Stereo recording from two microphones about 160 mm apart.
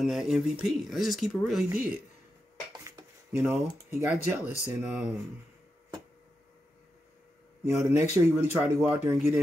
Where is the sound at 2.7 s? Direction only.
20° right (ahead or behind).